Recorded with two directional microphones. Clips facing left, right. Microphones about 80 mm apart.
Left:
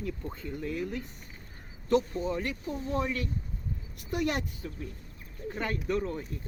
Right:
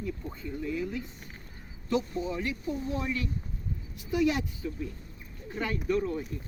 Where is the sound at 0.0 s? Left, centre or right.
Left.